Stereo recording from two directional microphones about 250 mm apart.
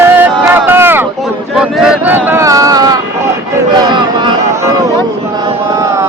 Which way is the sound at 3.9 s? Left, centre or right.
Centre.